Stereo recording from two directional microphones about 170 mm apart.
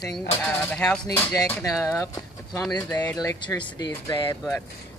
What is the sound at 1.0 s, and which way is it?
Speech, 20° left (ahead or behind).